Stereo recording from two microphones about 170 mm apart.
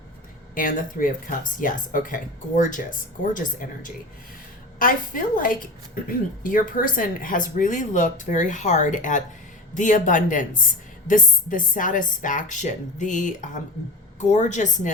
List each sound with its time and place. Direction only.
0.5 s a woman's voice: 50° left (ahead or behind)